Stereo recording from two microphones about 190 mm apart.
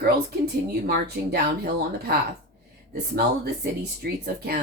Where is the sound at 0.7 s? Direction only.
55° right (ahead or behind).